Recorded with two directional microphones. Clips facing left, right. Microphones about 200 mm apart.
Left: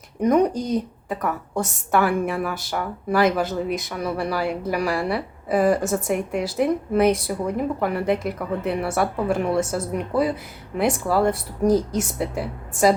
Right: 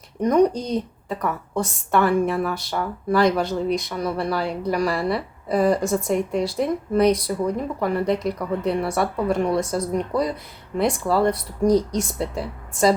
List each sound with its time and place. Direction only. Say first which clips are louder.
0.2 s speech: even; 10° left (ahead or behind)
0.5 s speech: left 2 dB; 20° right (ahead or behind)
1.0 s speech: even; centre (ahead or behind)